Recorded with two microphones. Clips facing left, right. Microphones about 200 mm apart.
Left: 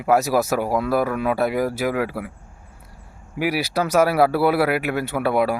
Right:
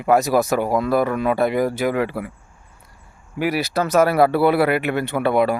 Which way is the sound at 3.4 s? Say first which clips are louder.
Right 1 dB; 10° left (ahead or behind).